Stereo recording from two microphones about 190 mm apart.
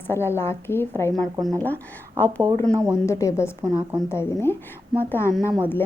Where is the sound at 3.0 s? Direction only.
15° left (ahead or behind).